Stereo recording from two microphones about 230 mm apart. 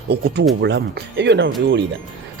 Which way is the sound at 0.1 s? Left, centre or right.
Right.